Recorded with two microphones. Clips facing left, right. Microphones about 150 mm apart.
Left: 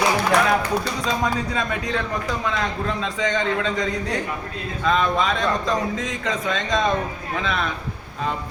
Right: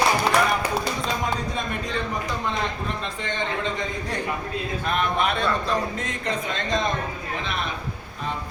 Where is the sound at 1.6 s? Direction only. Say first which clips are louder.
Left 3 dB; 90° left.